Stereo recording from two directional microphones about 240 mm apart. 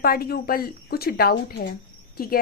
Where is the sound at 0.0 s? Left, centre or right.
Left.